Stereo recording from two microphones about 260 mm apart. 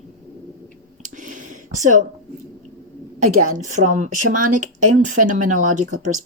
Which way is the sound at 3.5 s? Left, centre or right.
Right.